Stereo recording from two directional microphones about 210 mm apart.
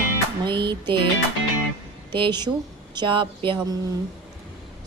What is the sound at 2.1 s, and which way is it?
Speech, 20° right (ahead or behind).